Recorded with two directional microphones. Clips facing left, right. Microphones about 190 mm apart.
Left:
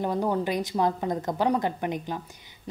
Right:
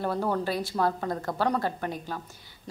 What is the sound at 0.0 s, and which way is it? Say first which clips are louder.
Speech: left 2 dB; 15° left (ahead or behind).